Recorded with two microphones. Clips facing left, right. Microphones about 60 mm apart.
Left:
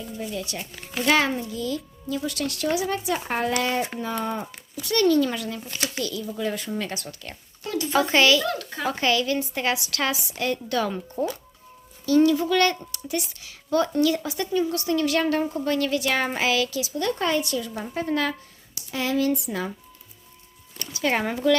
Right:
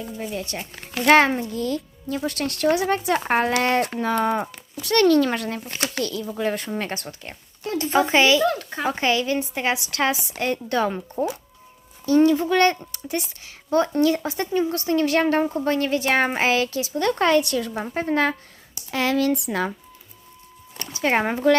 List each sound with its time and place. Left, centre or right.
0.0 s speech: right
1.0 s a woman's voice: right
17.7 s speech: right
18.9 s speech: right
20.7 s speech: right